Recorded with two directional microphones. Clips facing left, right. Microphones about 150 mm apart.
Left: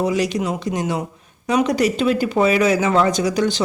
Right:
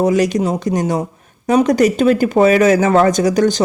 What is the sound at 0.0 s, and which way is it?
Speech, 45° right (ahead or behind).